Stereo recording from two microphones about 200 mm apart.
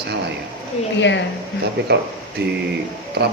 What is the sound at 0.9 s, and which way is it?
Speech, 60° left (ahead or behind).